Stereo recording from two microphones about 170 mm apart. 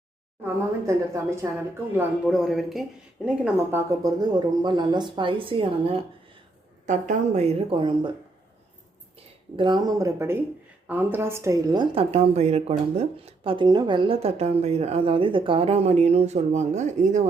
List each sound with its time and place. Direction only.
0.4 s a woman's voice: 15° right (ahead or behind)
2.0 s speech: 5° right (ahead or behind); by 6.0 s 35° right (ahead or behind)
6.8 s a woman's voice: 45° right (ahead or behind); by 8.1 s 30° right (ahead or behind)
9.1 s a woman's voice: 30° right (ahead or behind); by 17.2 s 45° right (ahead or behind)